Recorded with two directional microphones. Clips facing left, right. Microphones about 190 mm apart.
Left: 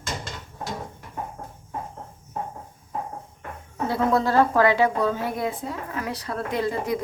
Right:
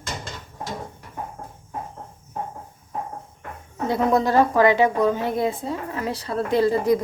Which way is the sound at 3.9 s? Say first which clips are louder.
Right 2 dB; 20° right (ahead or behind).